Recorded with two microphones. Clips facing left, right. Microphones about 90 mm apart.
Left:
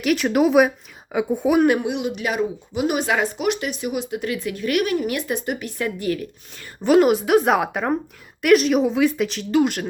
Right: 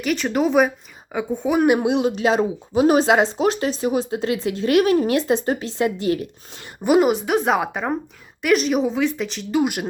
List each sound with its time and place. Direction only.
0.0 s speech: 5° left (ahead or behind)
1.9 s speech: 35° right (ahead or behind)
6.8 s speech: 5° right (ahead or behind)